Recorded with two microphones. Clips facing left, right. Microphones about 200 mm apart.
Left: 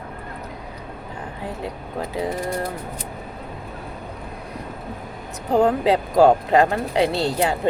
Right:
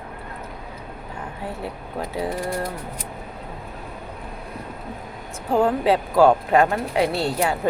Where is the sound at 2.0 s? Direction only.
20° left (ahead or behind).